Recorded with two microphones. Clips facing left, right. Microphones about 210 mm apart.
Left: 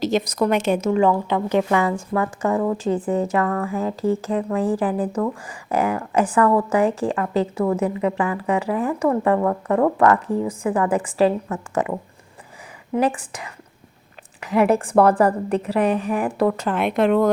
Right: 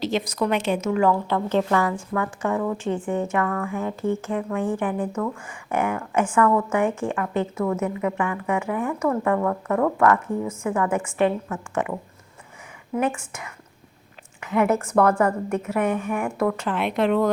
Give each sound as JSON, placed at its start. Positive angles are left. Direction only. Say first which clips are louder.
{"t": 0.0, "sound": "speech", "louder": "left 4 dB", "side_deg": 40}
{"t": 0.9, "sound": "a woman's voice", "louder": "left 2 dB", "side_deg": 20}
{"t": 1.9, "sound": "speech", "louder": "left 4 dB", "side_deg": 35}